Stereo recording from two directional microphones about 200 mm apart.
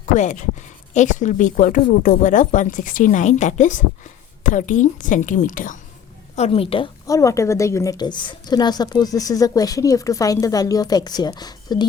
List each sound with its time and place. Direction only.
0.0 s speech: 35° left (ahead or behind)
6.3 s a woman's voice: 30° left (ahead or behind)